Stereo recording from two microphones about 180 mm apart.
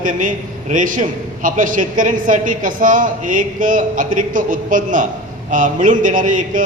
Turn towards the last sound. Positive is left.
turn(degrees=-45)  # may be behind; listen again after turning